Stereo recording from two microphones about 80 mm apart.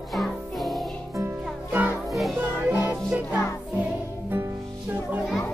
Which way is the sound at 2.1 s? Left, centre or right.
Centre.